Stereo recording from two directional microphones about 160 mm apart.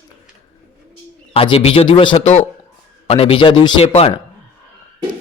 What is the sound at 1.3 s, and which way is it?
A man's voice, 35° left (ahead or behind).